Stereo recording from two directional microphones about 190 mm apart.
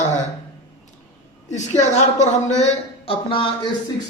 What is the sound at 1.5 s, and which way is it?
A woman's voice, 35° left (ahead or behind).